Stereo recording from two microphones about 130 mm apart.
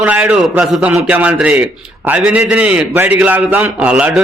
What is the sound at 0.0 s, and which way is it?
A man's voice, 10° right (ahead or behind).